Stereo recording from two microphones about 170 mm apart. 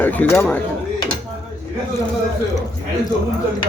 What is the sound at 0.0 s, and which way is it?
Speech, 10° left (ahead or behind).